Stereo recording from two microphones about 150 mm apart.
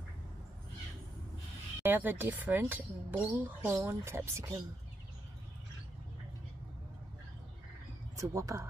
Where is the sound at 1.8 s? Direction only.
10° right (ahead or behind).